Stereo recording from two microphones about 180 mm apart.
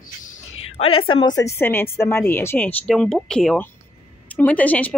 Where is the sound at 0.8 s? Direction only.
30° left (ahead or behind).